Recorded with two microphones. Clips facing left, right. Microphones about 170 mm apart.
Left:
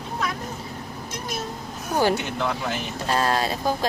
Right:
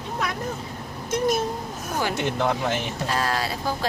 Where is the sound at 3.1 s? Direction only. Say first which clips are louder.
Left 4 dB; 25° left (ahead or behind).